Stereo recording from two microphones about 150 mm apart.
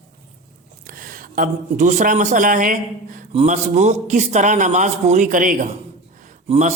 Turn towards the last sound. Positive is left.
turn(degrees=-50)  # may be behind; listen again after turning